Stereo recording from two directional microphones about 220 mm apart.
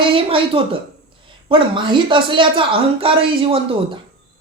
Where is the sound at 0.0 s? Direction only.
25° right (ahead or behind).